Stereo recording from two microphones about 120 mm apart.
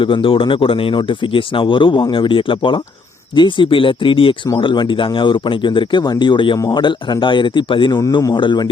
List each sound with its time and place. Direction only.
0.0 s speech: 45° left (ahead or behind)